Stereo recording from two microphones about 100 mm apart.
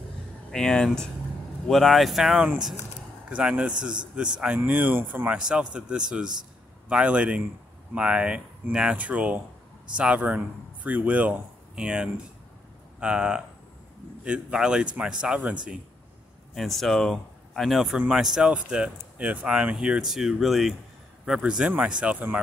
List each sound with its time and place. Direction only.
0.5 s a man's voice: 5° left (ahead or behind); by 15.5 s 10° right (ahead or behind)
16.5 s speech: centre (ahead or behind)